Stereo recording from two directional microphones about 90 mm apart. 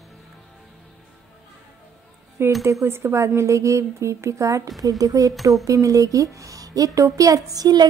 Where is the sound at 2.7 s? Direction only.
30° right (ahead or behind).